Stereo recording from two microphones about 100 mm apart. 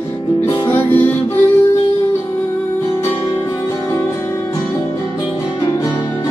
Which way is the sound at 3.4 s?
35° left (ahead or behind).